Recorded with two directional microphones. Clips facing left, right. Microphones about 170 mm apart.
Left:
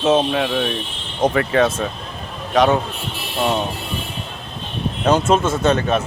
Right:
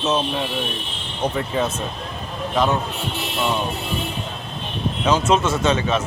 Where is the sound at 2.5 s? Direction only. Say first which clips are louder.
Left 5 dB; 70° left (ahead or behind).